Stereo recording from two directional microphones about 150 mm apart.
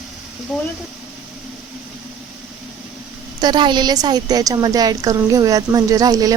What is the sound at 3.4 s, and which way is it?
A woman's voice, 30° right (ahead or behind).